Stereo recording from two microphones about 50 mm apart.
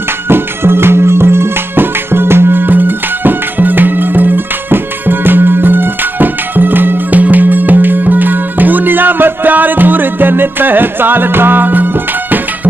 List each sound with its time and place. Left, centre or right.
0.3 s music: right